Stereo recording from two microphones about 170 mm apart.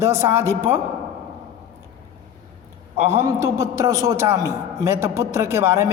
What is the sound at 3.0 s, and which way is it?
A man's voice, 15° right (ahead or behind).